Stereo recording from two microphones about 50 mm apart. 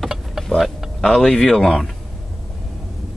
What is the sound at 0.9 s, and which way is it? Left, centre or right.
Speech, centre.